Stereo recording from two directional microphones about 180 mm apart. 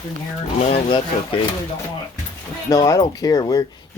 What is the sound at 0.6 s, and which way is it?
Speech, 35° left (ahead or behind).